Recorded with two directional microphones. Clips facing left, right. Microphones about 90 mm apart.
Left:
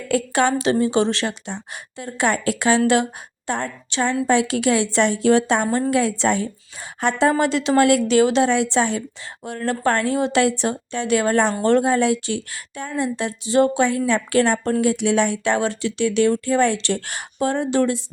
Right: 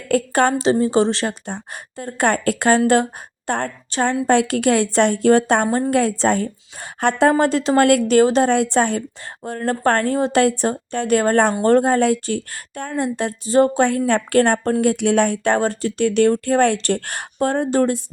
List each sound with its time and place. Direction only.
0.1 s a woman's voice: 45° right (ahead or behind)
0.6 s a woman's voice: 35° right (ahead or behind)
9.4 s a woman's voice: 40° right (ahead or behind)
14.1 s a woman's voice: 55° right (ahead or behind)